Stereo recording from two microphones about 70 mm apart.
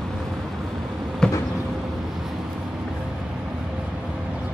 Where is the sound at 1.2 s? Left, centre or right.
Centre.